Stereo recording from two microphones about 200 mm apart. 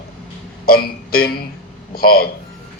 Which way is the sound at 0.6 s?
50° left (ahead or behind).